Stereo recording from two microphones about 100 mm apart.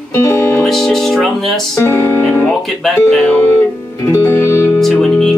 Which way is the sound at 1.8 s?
25° left (ahead or behind).